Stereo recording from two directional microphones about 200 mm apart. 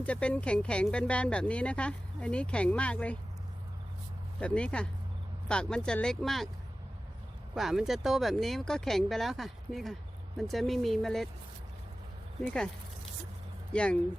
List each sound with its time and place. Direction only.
0.0 s speech: 5° left (ahead or behind)
4.4 s speech: 5° left (ahead or behind)
7.5 s speech: centre (ahead or behind)
13.7 s speech: 5° left (ahead or behind)